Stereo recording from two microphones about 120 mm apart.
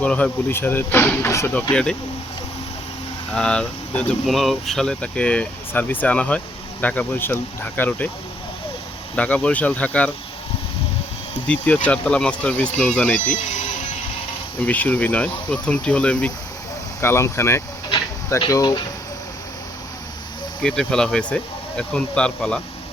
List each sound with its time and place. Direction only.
0.0 s speech: 10° left (ahead or behind)
1.7 s speech: 5° left (ahead or behind)
3.3 s speech: 5° left (ahead or behind)
9.1 s speech: 10° left (ahead or behind)
11.4 s speech: 10° left (ahead or behind)
14.7 s speech: 15° left (ahead or behind)
17.0 s speech: 20° left (ahead or behind)
18.3 s speech: 35° left (ahead or behind)
20.6 s speech: 5° left (ahead or behind)